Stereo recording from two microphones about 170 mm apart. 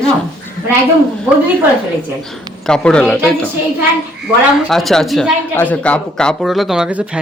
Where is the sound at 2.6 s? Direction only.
5° left (ahead or behind).